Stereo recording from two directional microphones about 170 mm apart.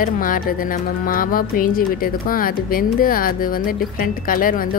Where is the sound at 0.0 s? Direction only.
55° left (ahead or behind).